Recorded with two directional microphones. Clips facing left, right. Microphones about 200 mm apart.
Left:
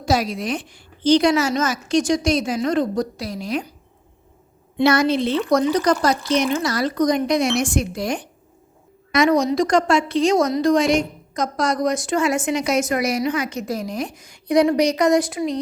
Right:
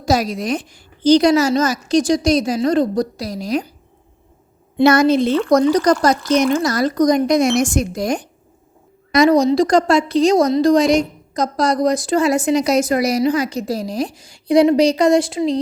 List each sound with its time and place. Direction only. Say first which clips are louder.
0.0 s a woman's voice: right 3 dB; 40° right (ahead or behind)
4.8 s a woman's voice: right 5 dB; 45° right (ahead or behind); by 15.5 s 25° right (ahead or behind)